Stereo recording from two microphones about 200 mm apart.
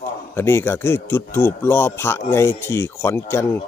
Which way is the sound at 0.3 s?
10° left (ahead or behind).